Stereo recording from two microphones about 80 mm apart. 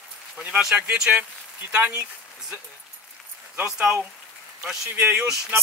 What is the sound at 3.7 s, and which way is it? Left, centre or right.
Speech, centre.